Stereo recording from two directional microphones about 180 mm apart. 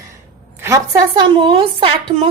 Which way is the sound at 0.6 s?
20° right (ahead or behind).